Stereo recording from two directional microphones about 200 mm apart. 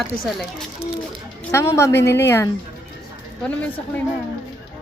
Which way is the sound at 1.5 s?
15° left (ahead or behind).